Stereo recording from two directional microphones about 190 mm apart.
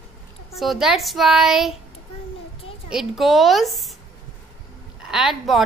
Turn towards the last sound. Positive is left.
turn(degrees=0)  # may be behind; listen again after turning